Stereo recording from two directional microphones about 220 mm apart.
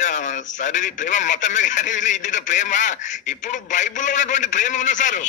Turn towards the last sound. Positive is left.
turn(degrees=35)  # may be behind; listen again after turning